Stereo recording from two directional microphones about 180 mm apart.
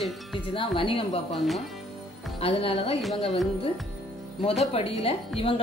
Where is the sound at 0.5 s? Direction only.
30° left (ahead or behind).